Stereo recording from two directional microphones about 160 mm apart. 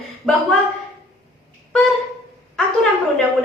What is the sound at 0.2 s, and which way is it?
Speech, centre (ahead or behind).